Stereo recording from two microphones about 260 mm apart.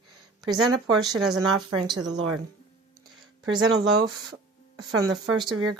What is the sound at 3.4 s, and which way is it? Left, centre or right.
Speech, right.